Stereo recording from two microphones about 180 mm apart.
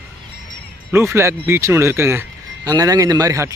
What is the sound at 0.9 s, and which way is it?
Speech, 15° right (ahead or behind).